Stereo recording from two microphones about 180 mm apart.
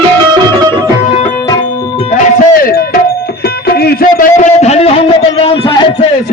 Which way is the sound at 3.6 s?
60° left (ahead or behind).